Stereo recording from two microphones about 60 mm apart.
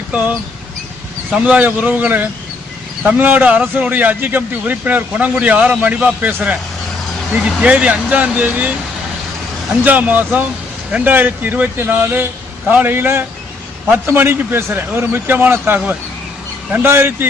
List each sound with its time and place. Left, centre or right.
1.3 s a man's voice: right
9.8 s a man's voice: right